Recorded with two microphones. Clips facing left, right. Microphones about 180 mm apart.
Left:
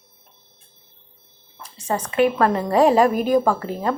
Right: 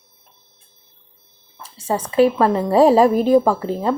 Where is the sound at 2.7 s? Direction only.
30° right (ahead or behind).